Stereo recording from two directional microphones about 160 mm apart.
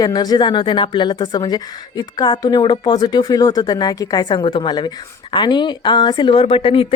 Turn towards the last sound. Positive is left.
turn(degrees=35)  # may be behind; listen again after turning